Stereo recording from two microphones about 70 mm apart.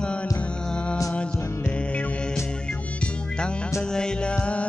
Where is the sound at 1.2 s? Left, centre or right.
Centre.